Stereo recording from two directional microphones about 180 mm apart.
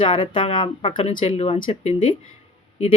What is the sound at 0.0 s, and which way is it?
Speech, 30° left (ahead or behind).